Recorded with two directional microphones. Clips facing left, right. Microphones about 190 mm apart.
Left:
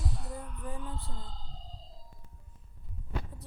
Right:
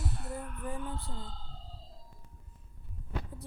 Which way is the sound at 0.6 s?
60° right (ahead or behind).